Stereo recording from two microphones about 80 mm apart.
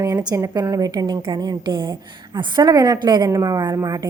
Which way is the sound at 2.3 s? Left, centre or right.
Right.